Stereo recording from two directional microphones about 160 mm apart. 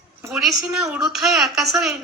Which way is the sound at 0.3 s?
5° right (ahead or behind).